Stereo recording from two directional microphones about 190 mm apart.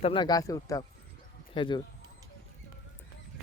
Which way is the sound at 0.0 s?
25° left (ahead or behind).